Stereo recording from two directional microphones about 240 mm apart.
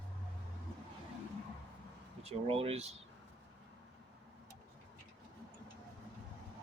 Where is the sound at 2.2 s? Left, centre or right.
Right.